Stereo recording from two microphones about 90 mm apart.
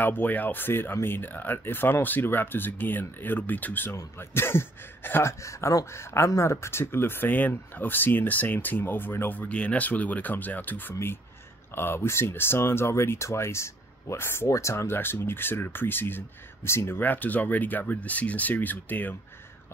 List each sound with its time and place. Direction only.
0.0 s speech: 20° left (ahead or behind)